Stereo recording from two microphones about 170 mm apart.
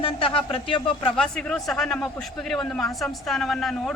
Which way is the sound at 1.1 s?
5° left (ahead or behind).